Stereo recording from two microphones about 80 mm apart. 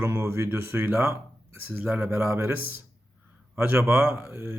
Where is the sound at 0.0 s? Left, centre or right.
Right.